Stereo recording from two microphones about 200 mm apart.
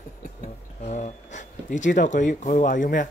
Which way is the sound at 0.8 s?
35° left (ahead or behind).